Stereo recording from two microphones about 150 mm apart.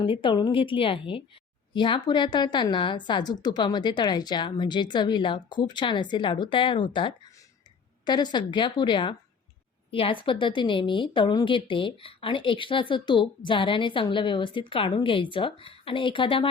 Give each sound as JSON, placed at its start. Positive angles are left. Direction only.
{"t": 0.0, "sound": "a woman's voice", "side_deg": 35}